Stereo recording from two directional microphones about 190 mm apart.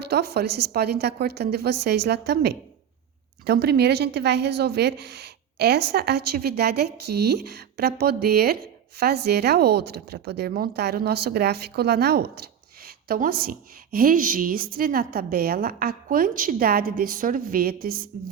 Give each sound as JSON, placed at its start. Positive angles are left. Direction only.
{"t": 0.0, "sound": "speech", "side_deg": -60}